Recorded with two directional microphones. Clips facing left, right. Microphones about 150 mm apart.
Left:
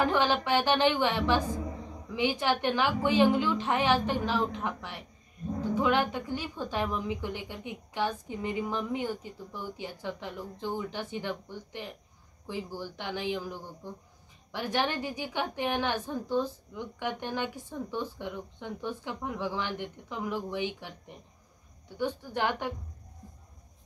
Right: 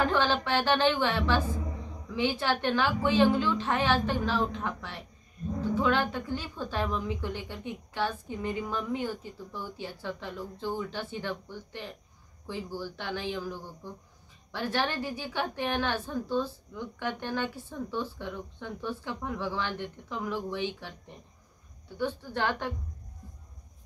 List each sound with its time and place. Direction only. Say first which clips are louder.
0.0 s a woman's voice: even; 15° left (ahead or behind)
21.9 s a woman's voice: even; 15° left (ahead or behind)